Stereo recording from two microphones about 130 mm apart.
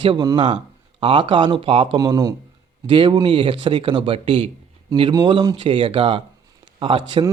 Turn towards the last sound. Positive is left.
turn(degrees=-40)  # may be behind; listen again after turning